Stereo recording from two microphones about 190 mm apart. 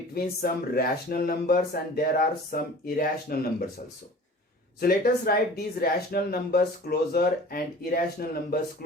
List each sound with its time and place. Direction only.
0.1 s speech: 50° left (ahead or behind)
4.8 s speech: 55° left (ahead or behind)